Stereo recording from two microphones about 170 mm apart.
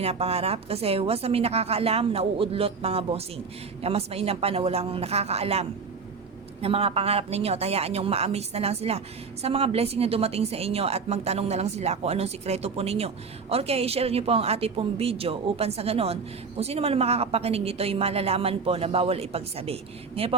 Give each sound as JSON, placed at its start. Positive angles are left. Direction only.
{"t": 0.0, "sound": "a woman's voice", "side_deg": -35}